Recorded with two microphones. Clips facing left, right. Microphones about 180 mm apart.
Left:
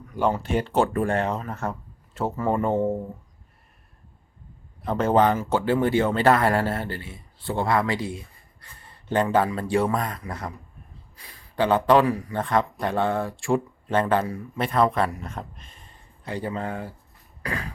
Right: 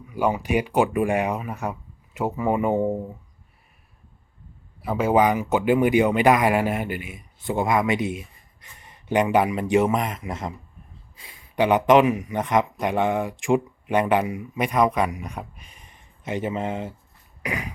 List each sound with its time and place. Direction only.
0.0 s speech: 10° right (ahead or behind)
2.7 s speech: centre (ahead or behind)
4.8 s a man's voice: 10° right (ahead or behind)
17.4 s cough: 15° right (ahead or behind)